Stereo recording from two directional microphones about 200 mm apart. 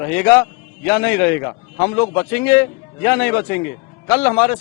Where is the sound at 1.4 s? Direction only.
20° left (ahead or behind).